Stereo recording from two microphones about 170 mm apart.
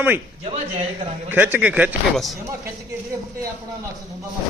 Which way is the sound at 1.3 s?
10° right (ahead or behind).